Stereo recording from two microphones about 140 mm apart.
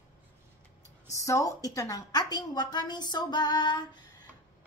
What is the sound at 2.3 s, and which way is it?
Female singing, 30° left (ahead or behind).